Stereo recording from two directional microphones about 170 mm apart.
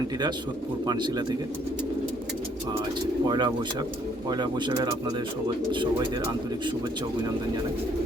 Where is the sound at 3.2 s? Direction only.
25° right (ahead or behind).